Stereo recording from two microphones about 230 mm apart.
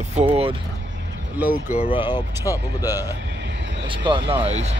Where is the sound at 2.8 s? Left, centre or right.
Centre.